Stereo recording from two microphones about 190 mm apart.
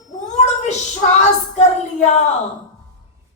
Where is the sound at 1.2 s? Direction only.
35° left (ahead or behind).